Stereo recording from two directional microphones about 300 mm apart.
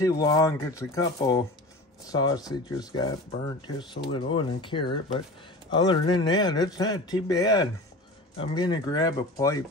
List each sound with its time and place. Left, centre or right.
0.0 s speech: centre